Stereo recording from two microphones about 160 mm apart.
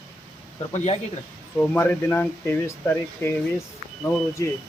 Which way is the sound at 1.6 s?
15° left (ahead or behind).